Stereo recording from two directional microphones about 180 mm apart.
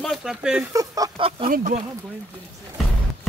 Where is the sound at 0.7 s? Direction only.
20° right (ahead or behind).